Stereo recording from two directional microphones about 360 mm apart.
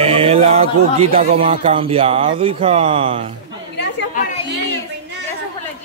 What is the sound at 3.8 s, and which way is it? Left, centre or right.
Chatter, left.